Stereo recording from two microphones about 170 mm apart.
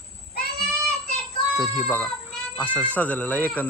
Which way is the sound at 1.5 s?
20° left (ahead or behind).